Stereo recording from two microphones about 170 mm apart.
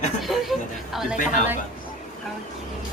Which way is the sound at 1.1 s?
50° left (ahead or behind).